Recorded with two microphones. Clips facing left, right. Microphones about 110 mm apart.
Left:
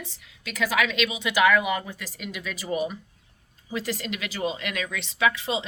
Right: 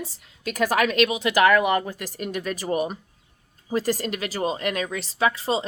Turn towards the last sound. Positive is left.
turn(degrees=-35)  # may be behind; listen again after turning